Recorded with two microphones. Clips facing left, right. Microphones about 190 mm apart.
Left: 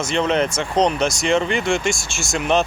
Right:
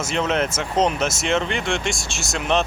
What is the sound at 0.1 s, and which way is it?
Speech, 5° right (ahead or behind).